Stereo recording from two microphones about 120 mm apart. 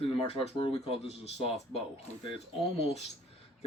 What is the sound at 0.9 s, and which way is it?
Speech, 60° left (ahead or behind).